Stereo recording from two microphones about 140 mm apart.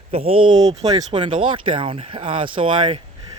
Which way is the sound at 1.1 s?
35° right (ahead or behind).